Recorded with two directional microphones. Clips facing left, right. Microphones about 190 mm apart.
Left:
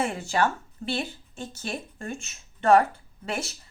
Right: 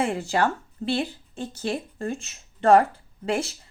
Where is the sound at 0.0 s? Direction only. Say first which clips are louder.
Right 2 dB; 30° right (ahead or behind).